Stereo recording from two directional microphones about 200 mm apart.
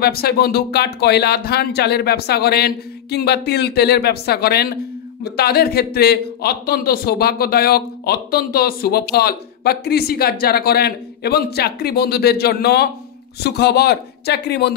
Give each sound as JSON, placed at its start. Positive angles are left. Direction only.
{"t": 0.0, "sound": "a man's voice", "side_deg": 50}